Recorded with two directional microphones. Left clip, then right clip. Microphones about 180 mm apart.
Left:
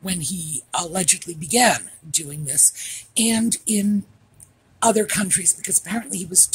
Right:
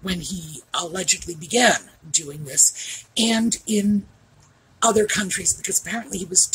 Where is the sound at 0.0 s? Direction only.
45° left (ahead or behind).